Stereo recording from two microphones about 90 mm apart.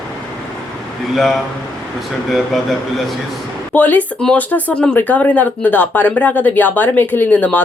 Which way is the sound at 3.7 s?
20° left (ahead or behind).